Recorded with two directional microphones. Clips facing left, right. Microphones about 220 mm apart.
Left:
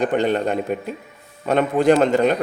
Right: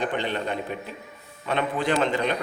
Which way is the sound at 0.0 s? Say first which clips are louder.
Left 8 dB; 45° left (ahead or behind).